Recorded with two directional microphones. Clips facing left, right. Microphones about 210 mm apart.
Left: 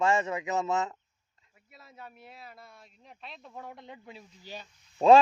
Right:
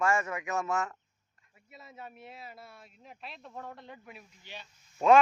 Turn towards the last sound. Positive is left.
turn(degrees=35)  # may be behind; listen again after turning